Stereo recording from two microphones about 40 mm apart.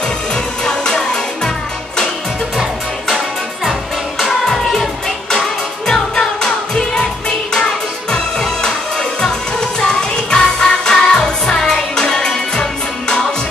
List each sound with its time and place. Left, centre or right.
0.3 s music: centre
3.1 s music: centre
5.3 s music: centre
8.1 s music: centre